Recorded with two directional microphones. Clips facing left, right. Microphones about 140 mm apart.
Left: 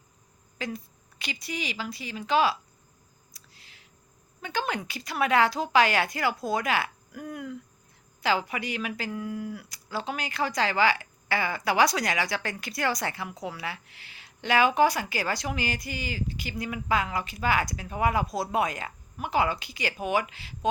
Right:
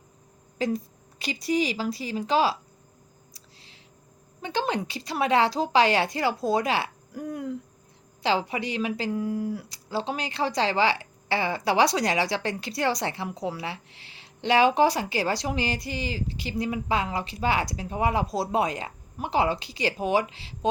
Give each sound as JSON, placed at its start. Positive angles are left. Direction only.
{"t": 0.6, "sound": "a woman's voice", "side_deg": -35}
{"t": 3.3, "sound": "a sound", "side_deg": -30}
{"t": 4.4, "sound": "speech", "side_deg": -30}